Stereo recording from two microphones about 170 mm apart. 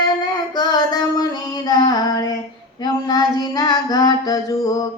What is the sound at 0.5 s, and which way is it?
Female singing, 25° left (ahead or behind).